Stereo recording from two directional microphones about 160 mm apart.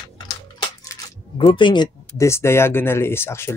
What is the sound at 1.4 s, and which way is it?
Speech, 30° left (ahead or behind).